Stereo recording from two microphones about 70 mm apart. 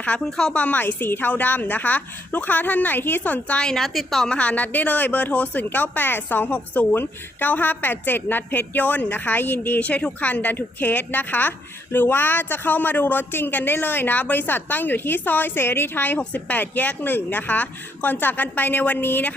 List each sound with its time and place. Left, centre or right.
0.3 s a woman's voice: centre
0.5 s a woman's voice: left
3.6 s a woman's voice: centre
4.4 s a woman's voice: left